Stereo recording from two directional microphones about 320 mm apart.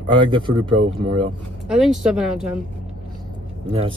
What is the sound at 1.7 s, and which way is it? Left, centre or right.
Speech, centre.